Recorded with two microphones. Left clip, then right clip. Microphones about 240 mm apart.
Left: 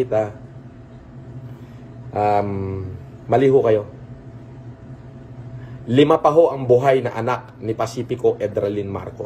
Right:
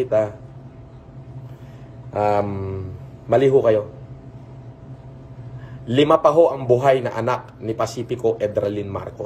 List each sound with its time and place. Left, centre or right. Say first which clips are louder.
0.0 s a man's voice: right 1 dB; centre
2.1 s a man's voice: left 1 dB; centre
5.9 s a man's voice: even; centre